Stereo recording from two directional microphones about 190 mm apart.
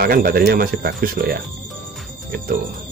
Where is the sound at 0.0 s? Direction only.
50° right (ahead or behind).